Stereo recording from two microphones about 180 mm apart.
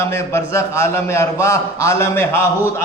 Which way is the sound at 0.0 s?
15° left (ahead or behind).